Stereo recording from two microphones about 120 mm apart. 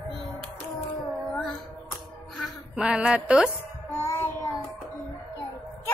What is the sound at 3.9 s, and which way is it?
Child singing, 20° left (ahead or behind).